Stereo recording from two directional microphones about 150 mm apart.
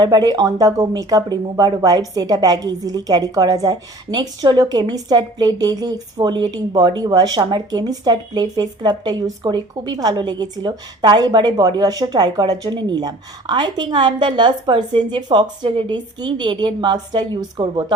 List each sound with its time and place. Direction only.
0.0 s speech: 25° right (ahead or behind)